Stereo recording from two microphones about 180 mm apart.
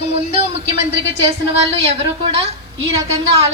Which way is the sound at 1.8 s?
35° right (ahead or behind).